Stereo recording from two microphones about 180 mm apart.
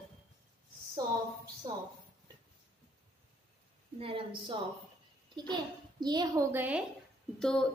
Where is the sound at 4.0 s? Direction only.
30° right (ahead or behind).